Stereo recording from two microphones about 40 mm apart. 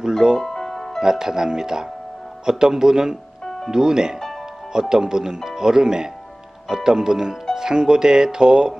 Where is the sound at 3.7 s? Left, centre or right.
Centre.